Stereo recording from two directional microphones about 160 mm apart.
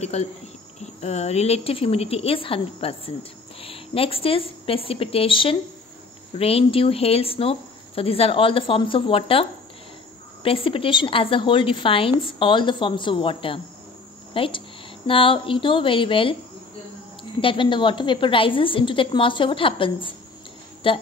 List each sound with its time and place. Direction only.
0.0 s cricket: 45° left (ahead or behind)
0.7 s speech: 45° left (ahead or behind)